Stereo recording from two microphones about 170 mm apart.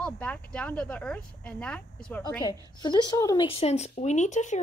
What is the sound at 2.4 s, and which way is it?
A woman's voice, 25° left (ahead or behind).